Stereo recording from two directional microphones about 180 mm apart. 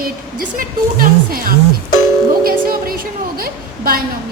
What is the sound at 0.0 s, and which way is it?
A woman's voice, 55° right (ahead or behind).